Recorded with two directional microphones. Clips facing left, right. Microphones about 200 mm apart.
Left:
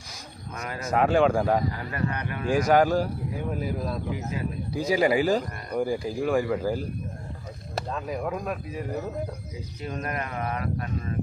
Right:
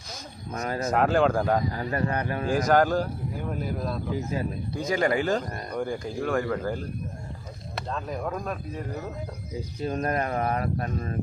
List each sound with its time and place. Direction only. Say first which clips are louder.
0.5 s speech: right 6 dB; 35° right (ahead or behind)
0.9 s speech: left 2 dB; centre (ahead or behind)
1.9 s speech: right 3 dB; 35° right (ahead or behind)
2.5 s speech: left 2 dB; 5° left (ahead or behind)
7.9 s speech: even; 5° left (ahead or behind)
9.8 s speech: right 5 dB; 35° right (ahead or behind)